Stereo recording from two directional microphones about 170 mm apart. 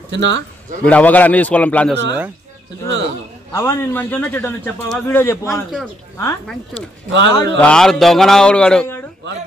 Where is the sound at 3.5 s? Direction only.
15° left (ahead or behind).